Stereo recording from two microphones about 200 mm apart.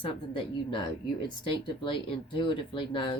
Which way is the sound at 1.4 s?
25° left (ahead or behind).